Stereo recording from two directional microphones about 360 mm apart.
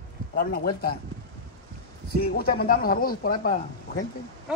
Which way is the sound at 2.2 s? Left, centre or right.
Left.